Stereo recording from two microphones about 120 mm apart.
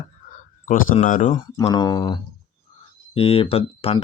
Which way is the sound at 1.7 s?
35° left (ahead or behind).